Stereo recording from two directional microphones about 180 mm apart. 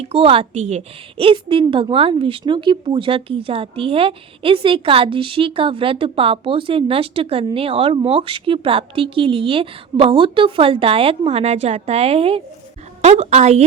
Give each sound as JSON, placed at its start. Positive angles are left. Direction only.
{"t": 0.0, "sound": "a woman's voice", "side_deg": -35}